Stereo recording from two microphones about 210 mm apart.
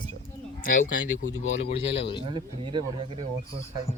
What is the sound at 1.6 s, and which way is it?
Speech, 30° left (ahead or behind).